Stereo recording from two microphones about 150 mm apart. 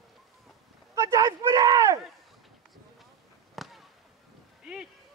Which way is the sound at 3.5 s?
Centre (ahead or behind).